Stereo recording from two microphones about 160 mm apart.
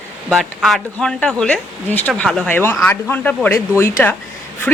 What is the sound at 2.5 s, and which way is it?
Speech, 15° left (ahead or behind).